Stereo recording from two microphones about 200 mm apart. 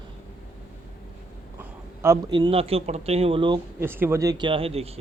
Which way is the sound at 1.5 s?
15° right (ahead or behind).